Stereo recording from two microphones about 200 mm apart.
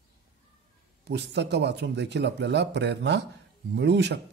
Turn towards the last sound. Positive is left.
turn(degrees=-60)  # may be behind; listen again after turning